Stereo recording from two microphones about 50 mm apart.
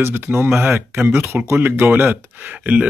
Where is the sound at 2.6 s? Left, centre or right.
Right.